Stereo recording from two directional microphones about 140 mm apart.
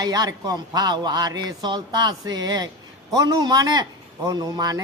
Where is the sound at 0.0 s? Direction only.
25° right (ahead or behind).